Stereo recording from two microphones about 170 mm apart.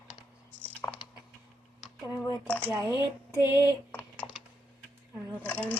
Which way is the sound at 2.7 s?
20° right (ahead or behind).